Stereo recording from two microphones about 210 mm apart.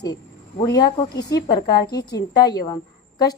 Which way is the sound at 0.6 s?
20° left (ahead or behind).